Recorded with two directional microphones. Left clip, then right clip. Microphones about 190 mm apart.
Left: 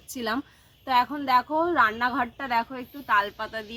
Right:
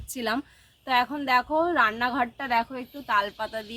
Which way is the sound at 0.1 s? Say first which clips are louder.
Right 1 dB; 10° right (ahead or behind).